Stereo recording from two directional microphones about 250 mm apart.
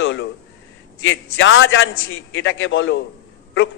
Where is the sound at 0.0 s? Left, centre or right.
Left.